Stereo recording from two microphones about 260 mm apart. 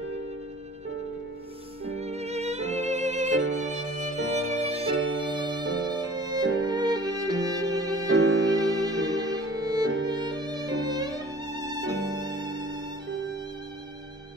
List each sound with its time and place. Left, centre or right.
2.0 s music: right
8.1 s music: right
8.5 s music: centre
11.9 s music: right
12.2 s music: centre